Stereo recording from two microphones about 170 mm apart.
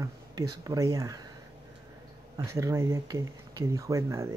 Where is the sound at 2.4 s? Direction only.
15° right (ahead or behind).